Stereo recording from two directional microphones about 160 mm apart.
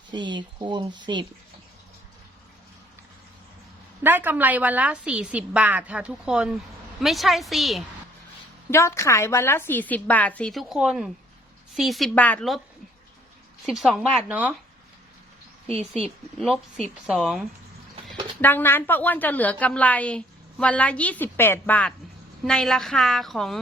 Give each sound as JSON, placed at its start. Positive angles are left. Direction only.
{"t": 0.1, "sound": "speech", "side_deg": -30}
{"t": 4.0, "sound": "a woman's voice", "side_deg": -10}
{"t": 8.7, "sound": "a woman's voice", "side_deg": 15}
{"t": 13.7, "sound": "a woman's voice", "side_deg": 0}
{"t": 17.2, "sound": "a woman's voice", "side_deg": 0}
{"t": 18.4, "sound": "a woman's voice", "side_deg": 15}